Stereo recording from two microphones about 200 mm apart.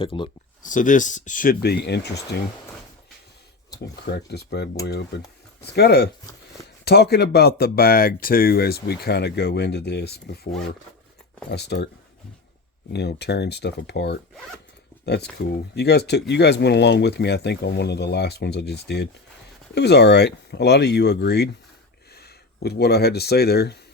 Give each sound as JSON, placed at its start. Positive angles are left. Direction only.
{"t": 0.0, "sound": "speech", "side_deg": 25}
{"t": 0.6, "sound": "speech", "side_deg": 40}
{"t": 1.6, "sound": "speech", "side_deg": 55}
{"t": 4.0, "sound": "speech", "side_deg": 55}
{"t": 11.5, "sound": "speech", "side_deg": 55}
{"t": 12.9, "sound": "speech", "side_deg": 55}